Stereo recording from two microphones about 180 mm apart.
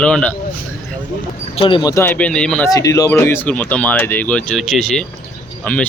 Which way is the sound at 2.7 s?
20° left (ahead or behind).